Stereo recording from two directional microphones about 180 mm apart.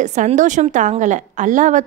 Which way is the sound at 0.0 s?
40° right (ahead or behind).